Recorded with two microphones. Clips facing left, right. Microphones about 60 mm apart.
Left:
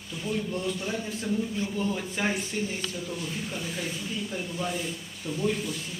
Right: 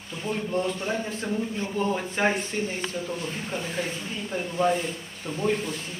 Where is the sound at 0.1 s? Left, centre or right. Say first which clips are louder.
Right 2 dB; right.